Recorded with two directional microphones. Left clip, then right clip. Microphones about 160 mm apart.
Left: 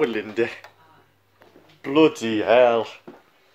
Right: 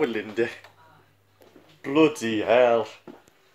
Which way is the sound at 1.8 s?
10° left (ahead or behind).